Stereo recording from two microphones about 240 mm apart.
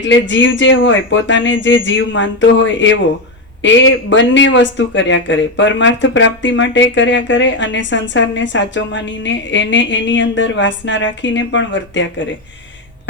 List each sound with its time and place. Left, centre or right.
0.0 s speech: left